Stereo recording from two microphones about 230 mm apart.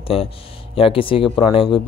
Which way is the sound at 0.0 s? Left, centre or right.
Left.